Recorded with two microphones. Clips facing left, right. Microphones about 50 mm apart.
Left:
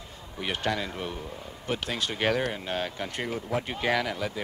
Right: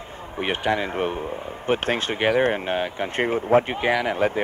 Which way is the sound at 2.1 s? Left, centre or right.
Right.